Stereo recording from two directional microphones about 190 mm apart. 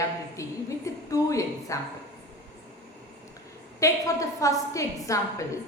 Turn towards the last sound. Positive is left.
turn(degrees=15)  # may be behind; listen again after turning